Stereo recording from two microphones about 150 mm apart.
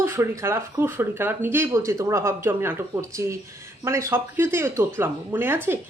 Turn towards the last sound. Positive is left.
turn(degrees=-15)  # may be behind; listen again after turning